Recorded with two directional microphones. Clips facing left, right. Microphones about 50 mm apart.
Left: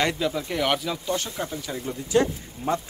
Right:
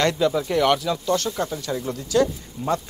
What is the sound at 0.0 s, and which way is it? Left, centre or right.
Speech, centre.